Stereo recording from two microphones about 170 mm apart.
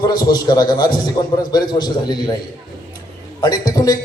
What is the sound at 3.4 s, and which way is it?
Speech, 25° left (ahead or behind).